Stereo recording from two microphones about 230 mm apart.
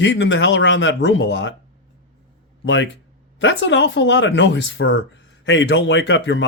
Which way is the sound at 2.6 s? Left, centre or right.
Left.